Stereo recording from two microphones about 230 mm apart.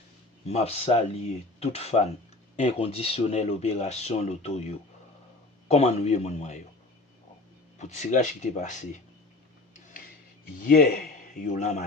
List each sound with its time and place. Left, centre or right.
0.4 s speech: left
7.8 s a man's voice: left
10.6 s a man's voice: left